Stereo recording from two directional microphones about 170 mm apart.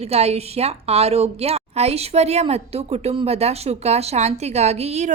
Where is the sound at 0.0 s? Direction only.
40° right (ahead or behind).